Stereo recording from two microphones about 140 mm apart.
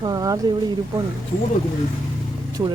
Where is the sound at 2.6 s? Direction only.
25° right (ahead or behind).